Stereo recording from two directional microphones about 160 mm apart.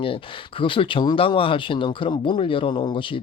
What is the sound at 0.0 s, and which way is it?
Speech, 35° left (ahead or behind).